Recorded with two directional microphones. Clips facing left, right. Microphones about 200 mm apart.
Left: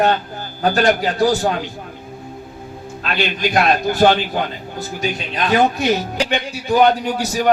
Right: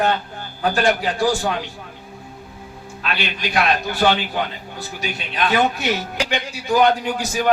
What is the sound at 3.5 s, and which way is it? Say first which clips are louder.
A man's voice: left 2 dB; 40° left (ahead or behind).